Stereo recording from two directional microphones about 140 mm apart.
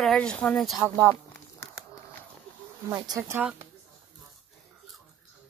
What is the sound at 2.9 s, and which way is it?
Speech, 25° right (ahead or behind).